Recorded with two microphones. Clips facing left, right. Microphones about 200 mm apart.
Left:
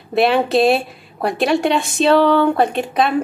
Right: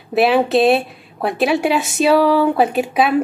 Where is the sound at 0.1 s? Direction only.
5° right (ahead or behind).